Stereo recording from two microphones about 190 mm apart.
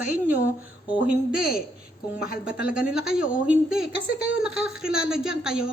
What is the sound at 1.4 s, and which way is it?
Speech, 50° left (ahead or behind).